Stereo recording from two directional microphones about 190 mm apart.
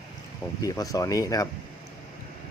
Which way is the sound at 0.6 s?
20° left (ahead or behind).